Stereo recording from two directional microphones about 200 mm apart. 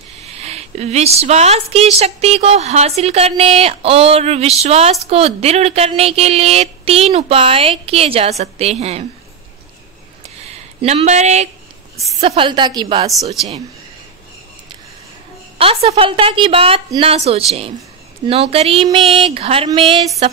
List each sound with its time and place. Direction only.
0.2 s a woman's voice: 30° right (ahead or behind)
10.8 s a woman's voice: 30° right (ahead or behind)
15.5 s a woman's voice: 30° right (ahead or behind)